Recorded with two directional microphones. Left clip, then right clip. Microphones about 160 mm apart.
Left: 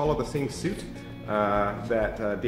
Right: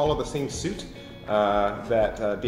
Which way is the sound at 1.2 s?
20° left (ahead or behind).